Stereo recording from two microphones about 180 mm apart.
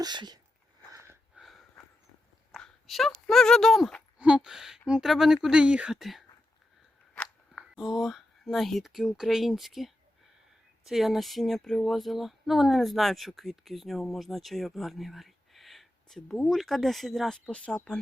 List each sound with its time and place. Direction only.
0.0 s speech: 25° right (ahead or behind)
0.9 s sniff: 15° right (ahead or behind)
1.4 s a sound: centre (ahead or behind)
2.5 s speech: centre (ahead or behind)